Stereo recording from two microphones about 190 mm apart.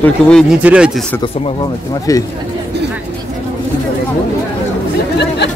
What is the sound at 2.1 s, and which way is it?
Speech, 20° left (ahead or behind).